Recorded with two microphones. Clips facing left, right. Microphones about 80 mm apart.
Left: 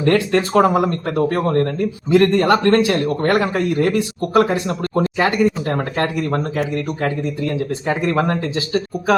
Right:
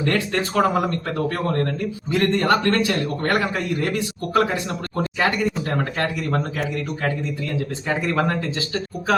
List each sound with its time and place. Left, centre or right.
0.0 s a man's voice: left